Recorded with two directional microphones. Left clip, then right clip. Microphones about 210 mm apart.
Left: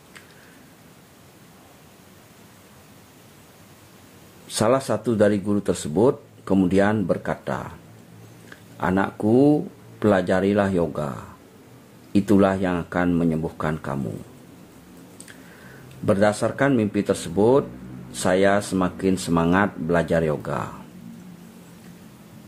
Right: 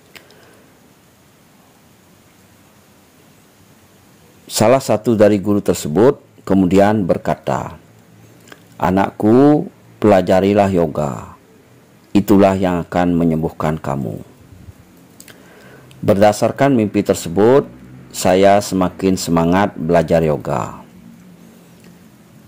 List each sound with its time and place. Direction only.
4.5 s speech: 30° right (ahead or behind)
16.1 s speech: 30° right (ahead or behind)